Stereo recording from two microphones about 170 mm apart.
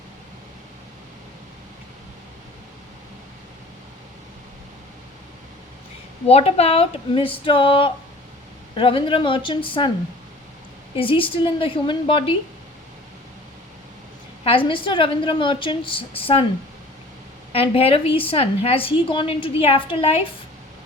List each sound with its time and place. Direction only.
6.2 s a woman's voice: 35° left (ahead or behind)
10.9 s a woman's voice: 30° left (ahead or behind)
14.4 s a woman's voice: 30° left (ahead or behind)
17.5 s a woman's voice: 35° left (ahead or behind)